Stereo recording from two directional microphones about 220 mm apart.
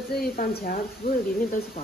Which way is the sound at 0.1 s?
40° left (ahead or behind).